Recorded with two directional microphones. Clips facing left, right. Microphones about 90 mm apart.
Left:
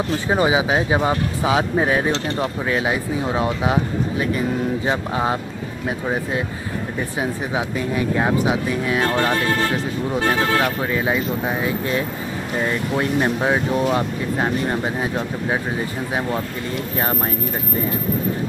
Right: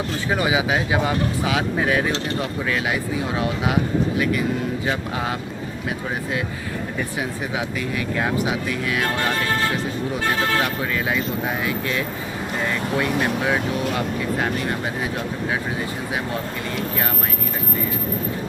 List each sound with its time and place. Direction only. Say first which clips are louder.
0.3 s speech: left 3 dB; 30° left (ahead or behind)
8.2 s speech: left 2 dB; 25° left (ahead or behind)
10.6 s speech: left 3 dB; 25° left (ahead or behind)